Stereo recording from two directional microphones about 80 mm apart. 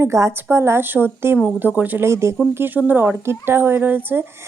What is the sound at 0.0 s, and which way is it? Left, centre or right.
A woman's voice, right.